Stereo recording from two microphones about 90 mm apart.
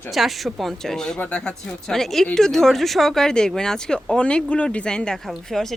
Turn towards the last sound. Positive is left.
turn(degrees=5)  # may be behind; listen again after turning